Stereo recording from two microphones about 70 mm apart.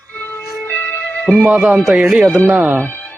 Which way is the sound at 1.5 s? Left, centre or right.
Centre.